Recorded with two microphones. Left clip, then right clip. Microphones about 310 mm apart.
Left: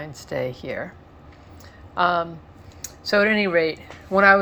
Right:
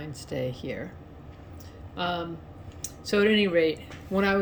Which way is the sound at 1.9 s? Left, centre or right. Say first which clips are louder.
Left 10 dB; centre.